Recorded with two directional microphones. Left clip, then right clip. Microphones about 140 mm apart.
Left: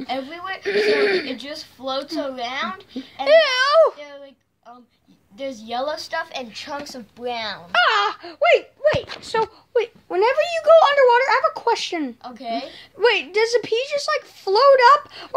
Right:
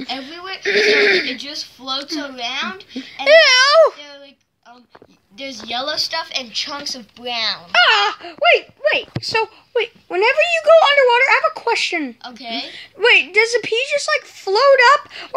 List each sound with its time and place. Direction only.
0.4 s chuckle: 50° left (ahead or behind)
0.7 s speech: 10° right (ahead or behind)
1.4 s speech: 55° left (ahead or behind)
3.3 s speech: 15° right (ahead or behind)
5.5 s speech: 60° left (ahead or behind)
7.7 s speech: 30° right (ahead or behind); by 15.3 s 10° right (ahead or behind)